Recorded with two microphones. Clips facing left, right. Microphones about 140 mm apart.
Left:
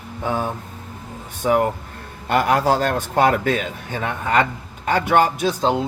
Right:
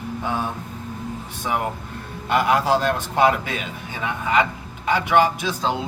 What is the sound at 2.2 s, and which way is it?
A man's voice, 45° left (ahead or behind).